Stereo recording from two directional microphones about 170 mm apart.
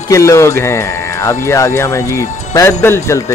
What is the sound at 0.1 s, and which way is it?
Speech, 20° left (ahead or behind).